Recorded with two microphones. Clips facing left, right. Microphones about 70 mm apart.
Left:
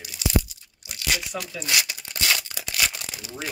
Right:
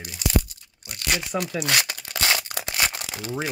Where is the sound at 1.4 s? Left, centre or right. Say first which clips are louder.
Right 7 dB; right.